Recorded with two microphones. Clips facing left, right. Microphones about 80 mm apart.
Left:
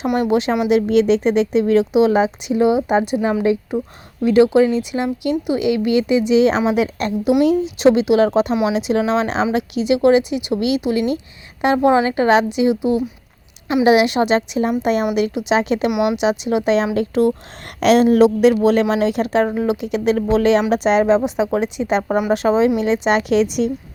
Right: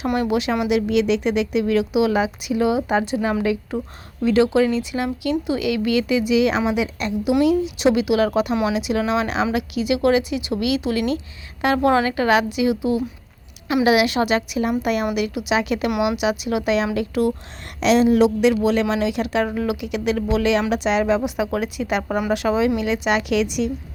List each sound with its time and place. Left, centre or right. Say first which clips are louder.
0.2 s speech: left 4 dB; left
6.7 s speech: left 4 dB; left
17.7 s speech: left 3 dB; left